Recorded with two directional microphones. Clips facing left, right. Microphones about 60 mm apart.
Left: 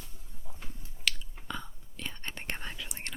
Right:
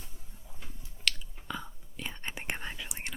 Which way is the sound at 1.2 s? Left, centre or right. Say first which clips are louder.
Right 1 dB; centre.